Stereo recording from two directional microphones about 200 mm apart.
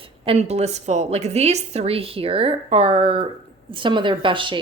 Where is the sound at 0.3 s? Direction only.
35° right (ahead or behind).